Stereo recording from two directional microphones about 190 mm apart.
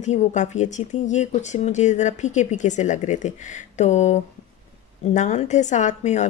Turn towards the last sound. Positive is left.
turn(degrees=35)  # may be behind; listen again after turning